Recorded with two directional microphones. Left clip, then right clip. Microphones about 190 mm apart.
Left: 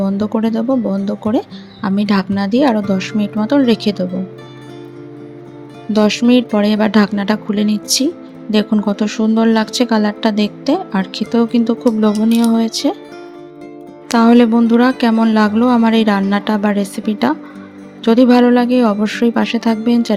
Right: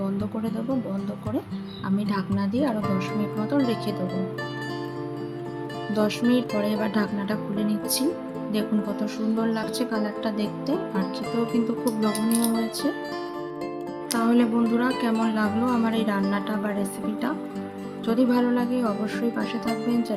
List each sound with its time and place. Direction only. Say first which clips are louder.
0.0 s speech: left 12 dB; 40° left (ahead or behind)
5.9 s speech: left 11 dB; 35° left (ahead or behind)
14.1 s speech: left 13 dB; 40° left (ahead or behind)